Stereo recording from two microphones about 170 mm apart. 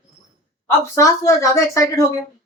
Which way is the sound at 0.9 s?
20° left (ahead or behind).